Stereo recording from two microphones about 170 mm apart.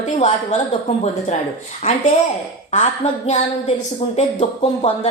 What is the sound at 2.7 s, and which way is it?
A woman's voice, 40° left (ahead or behind).